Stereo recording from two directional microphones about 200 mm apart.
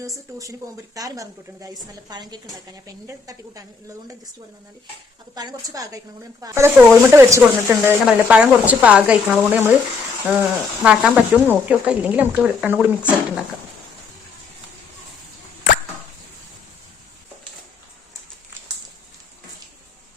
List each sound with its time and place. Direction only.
0.9 s a woman's voice: 15° right (ahead or behind)
5.3 s speech: 20° right (ahead or behind)